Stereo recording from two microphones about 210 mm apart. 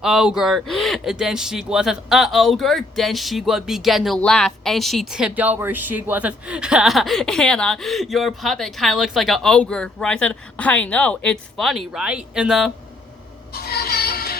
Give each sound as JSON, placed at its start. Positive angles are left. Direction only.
{"t": 0.0, "sound": "speech", "side_deg": -5}
{"t": 13.5, "sound": "music", "side_deg": 50}